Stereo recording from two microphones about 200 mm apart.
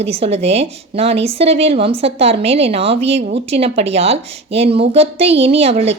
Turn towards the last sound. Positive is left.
turn(degrees=-30)  # may be behind; listen again after turning